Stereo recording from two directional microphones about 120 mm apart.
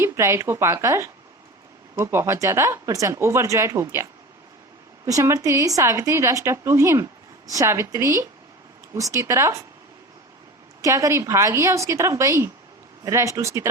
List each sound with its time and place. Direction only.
0.0 s speech: 25° right (ahead or behind)
5.0 s speech: 25° right (ahead or behind)
10.8 s speech: 25° right (ahead or behind)